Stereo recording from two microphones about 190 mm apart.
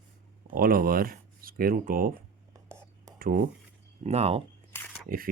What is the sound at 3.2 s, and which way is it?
Speech, 45° right (ahead or behind).